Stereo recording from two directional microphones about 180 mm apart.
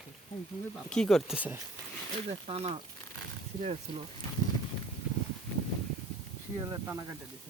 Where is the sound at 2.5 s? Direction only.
35° right (ahead or behind).